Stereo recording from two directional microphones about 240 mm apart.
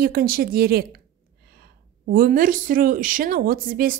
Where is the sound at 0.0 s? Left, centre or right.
Right.